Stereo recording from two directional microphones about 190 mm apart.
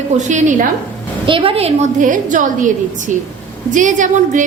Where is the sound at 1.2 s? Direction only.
25° right (ahead or behind); by 2.7 s 45° right (ahead or behind).